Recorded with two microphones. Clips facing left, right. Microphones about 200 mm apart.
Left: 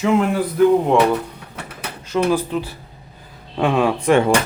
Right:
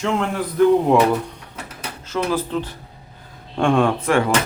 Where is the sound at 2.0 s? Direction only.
15° left (ahead or behind).